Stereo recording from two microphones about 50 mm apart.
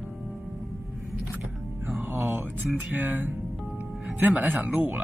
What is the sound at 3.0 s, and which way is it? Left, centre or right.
Speech, right.